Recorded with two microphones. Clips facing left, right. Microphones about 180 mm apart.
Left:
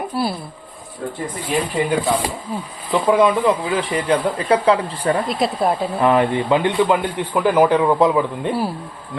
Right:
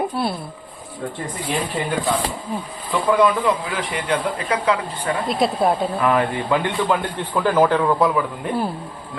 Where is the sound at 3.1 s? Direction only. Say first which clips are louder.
Left 2 dB; 20° left (ahead or behind).